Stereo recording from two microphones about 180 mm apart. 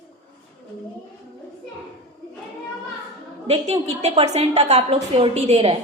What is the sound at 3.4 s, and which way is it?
A woman's voice, 35° right (ahead or behind).